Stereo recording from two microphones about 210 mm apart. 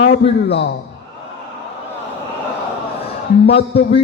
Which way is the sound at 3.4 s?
50° left (ahead or behind).